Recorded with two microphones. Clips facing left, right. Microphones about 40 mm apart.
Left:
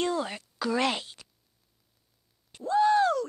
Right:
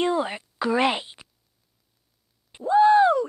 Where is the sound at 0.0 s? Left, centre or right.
Right.